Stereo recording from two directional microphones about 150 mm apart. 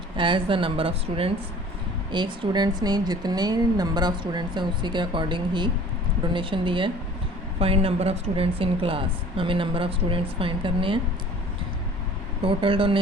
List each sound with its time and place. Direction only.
0.2 s a woman's voice: 35° right (ahead or behind)
12.4 s a woman's voice: 35° right (ahead or behind)